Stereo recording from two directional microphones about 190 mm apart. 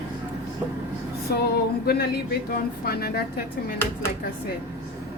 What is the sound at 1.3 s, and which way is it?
Speech, 55° left (ahead or behind).